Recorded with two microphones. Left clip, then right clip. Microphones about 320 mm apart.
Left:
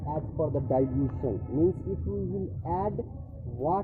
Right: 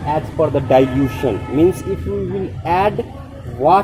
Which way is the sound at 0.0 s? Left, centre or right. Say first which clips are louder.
Right 14 dB; right.